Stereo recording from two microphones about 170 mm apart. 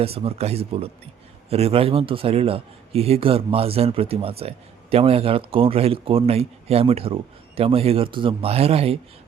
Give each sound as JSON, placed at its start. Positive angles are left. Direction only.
{"t": 0.0, "sound": "speech", "side_deg": -35}